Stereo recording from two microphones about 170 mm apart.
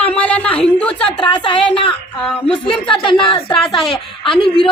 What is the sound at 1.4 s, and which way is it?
Speech, 30° left (ahead or behind).